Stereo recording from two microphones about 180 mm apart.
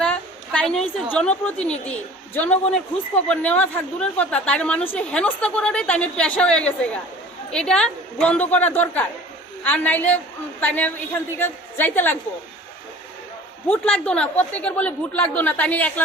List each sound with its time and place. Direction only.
0.0 s a sound: 5° left (ahead or behind)
1.1 s a woman's voice: 5° left (ahead or behind)
13.7 s a woman's voice: 5° left (ahead or behind)